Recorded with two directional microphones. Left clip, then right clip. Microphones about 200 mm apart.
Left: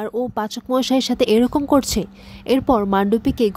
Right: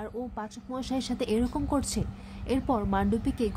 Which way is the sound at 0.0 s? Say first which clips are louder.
Left 13 dB; 50° left (ahead or behind).